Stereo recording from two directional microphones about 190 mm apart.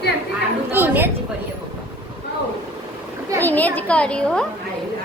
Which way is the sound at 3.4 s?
10° left (ahead or behind).